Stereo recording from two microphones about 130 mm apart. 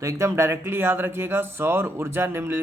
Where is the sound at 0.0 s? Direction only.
20° right (ahead or behind).